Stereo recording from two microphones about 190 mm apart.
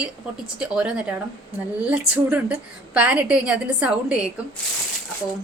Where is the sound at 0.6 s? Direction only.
5° right (ahead or behind).